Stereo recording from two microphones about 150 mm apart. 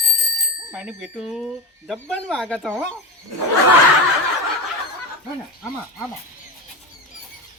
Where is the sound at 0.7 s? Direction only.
5° right (ahead or behind).